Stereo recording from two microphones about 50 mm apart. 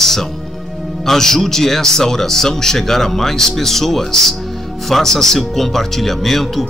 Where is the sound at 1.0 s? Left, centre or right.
Centre.